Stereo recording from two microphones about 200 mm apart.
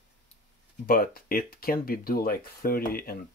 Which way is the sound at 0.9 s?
45° left (ahead or behind).